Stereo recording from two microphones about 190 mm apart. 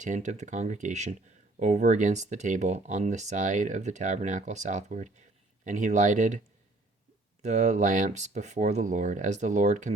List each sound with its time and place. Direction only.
0.0 s speech: 40° right (ahead or behind)
7.4 s speech: 40° right (ahead or behind)